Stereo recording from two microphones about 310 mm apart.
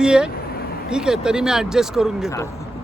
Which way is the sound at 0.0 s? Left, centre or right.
Centre.